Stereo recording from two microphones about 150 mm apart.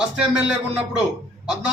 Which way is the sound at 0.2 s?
5° right (ahead or behind).